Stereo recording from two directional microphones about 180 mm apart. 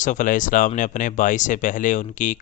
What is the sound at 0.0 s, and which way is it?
Speech, 45° left (ahead or behind).